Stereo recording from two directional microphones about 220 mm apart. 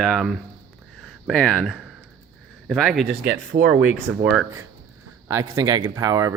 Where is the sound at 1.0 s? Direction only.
Centre (ahead or behind).